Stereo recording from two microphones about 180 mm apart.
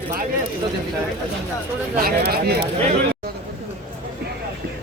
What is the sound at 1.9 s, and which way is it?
Speech, 50° right (ahead or behind).